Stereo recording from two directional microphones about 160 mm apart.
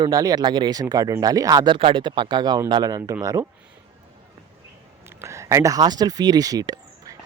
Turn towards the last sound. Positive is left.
turn(degrees=-25)  # may be behind; listen again after turning